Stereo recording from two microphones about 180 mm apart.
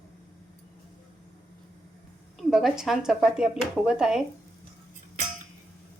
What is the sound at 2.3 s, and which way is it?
A woman's voice, centre (ahead or behind).